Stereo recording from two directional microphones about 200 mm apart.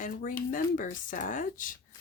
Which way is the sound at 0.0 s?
40° left (ahead or behind).